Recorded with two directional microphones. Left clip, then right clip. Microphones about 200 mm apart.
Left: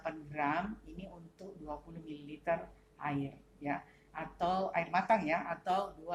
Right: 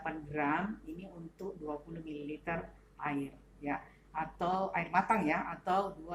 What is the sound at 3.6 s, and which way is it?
A woman's voice, 20° left (ahead or behind).